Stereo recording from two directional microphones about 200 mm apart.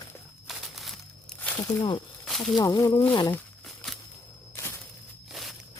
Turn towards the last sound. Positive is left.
turn(degrees=0)  # may be behind; listen again after turning